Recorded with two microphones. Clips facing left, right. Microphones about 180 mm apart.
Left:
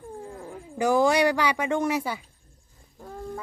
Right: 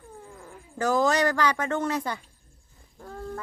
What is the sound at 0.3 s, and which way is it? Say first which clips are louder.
Cat: left 7 dB; 35° left (ahead or behind).